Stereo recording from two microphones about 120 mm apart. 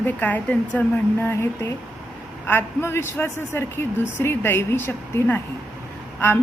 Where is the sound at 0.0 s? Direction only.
15° left (ahead or behind).